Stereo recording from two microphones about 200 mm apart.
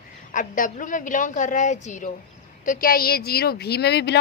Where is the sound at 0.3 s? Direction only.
40° left (ahead or behind).